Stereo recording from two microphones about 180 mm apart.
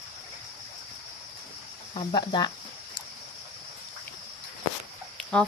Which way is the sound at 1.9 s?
25° left (ahead or behind).